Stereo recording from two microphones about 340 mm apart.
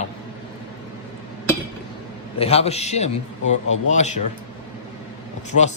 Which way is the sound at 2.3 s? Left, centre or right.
Centre.